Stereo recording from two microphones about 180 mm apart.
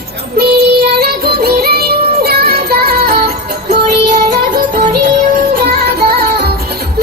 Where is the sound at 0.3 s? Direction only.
60° right (ahead or behind).